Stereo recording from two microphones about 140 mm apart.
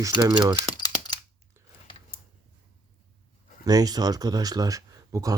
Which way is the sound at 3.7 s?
25° right (ahead or behind).